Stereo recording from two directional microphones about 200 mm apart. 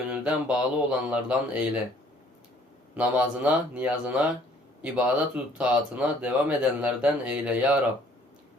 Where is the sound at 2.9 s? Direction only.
5° right (ahead or behind).